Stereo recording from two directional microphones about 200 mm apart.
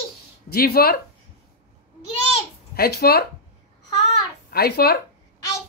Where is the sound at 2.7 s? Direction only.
50° left (ahead or behind).